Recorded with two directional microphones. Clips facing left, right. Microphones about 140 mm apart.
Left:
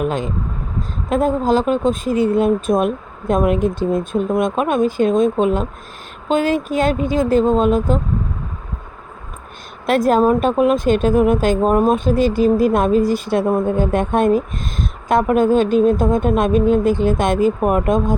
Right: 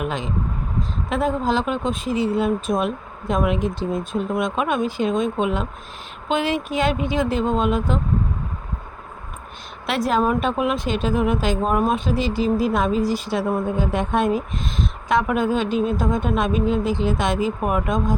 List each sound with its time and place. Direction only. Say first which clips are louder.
0.0 s speech: left 5 dB; 45° left (ahead or behind)
9.8 s speech: left 6 dB; 45° left (ahead or behind)